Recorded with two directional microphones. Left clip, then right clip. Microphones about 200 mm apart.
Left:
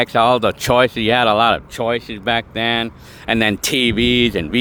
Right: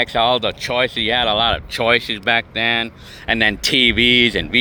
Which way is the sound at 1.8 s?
10° left (ahead or behind).